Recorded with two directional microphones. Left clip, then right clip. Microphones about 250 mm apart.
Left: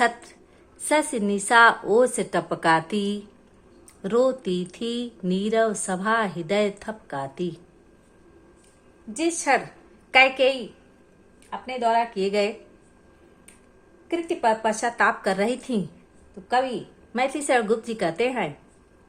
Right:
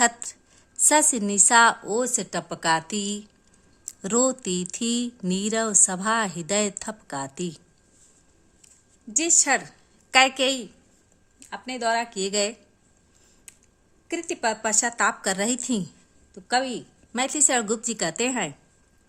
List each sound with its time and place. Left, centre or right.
0.0 s a woman's voice: right
9.2 s speech: right
14.1 s speech: right
17.1 s speech: right